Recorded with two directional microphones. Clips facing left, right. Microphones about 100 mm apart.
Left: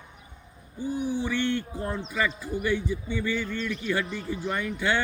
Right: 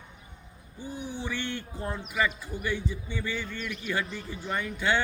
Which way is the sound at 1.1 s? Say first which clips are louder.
Left 5 dB; 15° right (ahead or behind).